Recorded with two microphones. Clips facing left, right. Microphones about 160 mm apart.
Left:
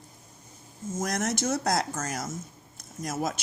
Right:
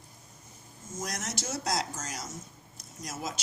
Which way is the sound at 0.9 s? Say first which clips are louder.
Left 8 dB; 55° left (ahead or behind).